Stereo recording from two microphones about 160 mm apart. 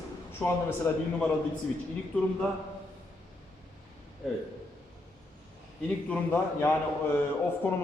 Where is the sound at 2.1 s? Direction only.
10° left (ahead or behind).